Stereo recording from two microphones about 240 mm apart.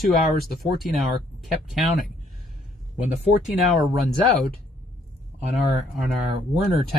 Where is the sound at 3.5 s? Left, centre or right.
Centre.